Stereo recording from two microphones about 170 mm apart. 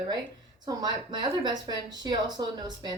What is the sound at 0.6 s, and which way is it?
Speech, 25° right (ahead or behind).